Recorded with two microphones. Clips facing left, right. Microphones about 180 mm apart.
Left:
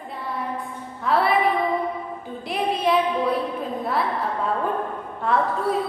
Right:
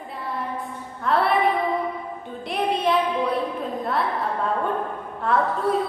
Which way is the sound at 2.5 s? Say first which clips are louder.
Even; centre (ahead or behind).